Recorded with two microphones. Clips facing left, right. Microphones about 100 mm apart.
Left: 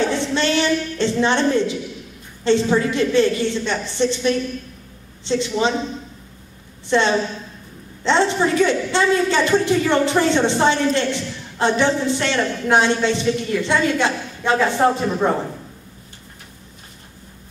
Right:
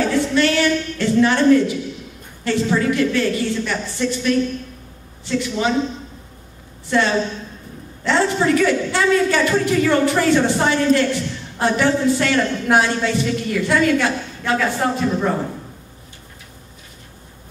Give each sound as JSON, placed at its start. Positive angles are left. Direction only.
{"t": 0.0, "sound": "a sound", "side_deg": 25}
{"t": 2.4, "sound": "a man's voice", "side_deg": 25}
{"t": 6.9, "sound": "a man's voice", "side_deg": 25}